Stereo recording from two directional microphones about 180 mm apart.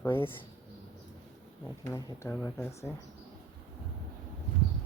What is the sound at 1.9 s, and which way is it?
Speech, 15° left (ahead or behind).